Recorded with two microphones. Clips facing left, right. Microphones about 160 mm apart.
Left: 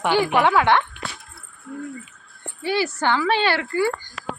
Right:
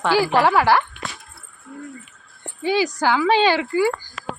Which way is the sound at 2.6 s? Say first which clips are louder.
Right 3 dB; 15° right (ahead or behind).